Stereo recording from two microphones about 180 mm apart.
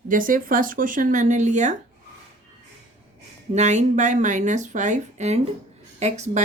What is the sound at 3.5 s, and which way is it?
A woman's voice, 40° right (ahead or behind).